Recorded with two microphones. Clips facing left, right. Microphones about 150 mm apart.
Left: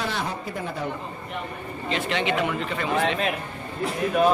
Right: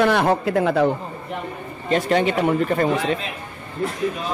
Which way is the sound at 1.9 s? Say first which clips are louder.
Right 7 dB; 45° right (ahead or behind).